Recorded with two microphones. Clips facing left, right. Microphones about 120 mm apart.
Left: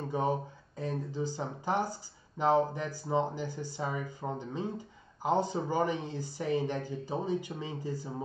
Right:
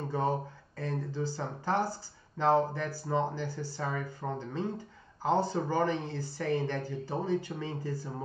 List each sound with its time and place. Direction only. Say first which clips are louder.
0.1 s speech: even; 15° left (ahead or behind)